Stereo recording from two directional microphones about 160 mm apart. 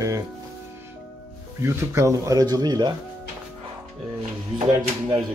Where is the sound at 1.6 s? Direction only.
15° right (ahead or behind).